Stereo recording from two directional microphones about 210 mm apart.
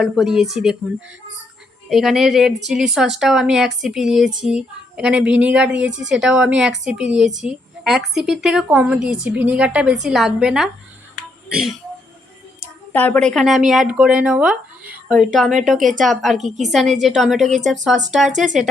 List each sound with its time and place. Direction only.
0.0 s a woman's voice: centre (ahead or behind)
12.5 s a woman's voice: 10° left (ahead or behind)
15.8 s speech: 40° right (ahead or behind)
16.0 s a woman's voice: centre (ahead or behind)